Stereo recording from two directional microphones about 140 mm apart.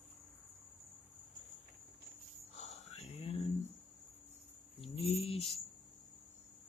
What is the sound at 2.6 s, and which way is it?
Whispering, 50° left (ahead or behind).